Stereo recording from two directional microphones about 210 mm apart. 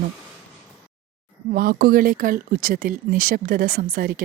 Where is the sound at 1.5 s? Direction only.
45° right (ahead or behind).